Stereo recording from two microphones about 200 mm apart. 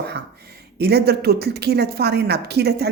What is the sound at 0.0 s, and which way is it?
Speech, 55° right (ahead or behind).